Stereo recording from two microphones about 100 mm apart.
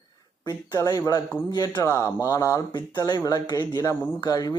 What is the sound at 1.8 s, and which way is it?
Speech, 30° left (ahead or behind).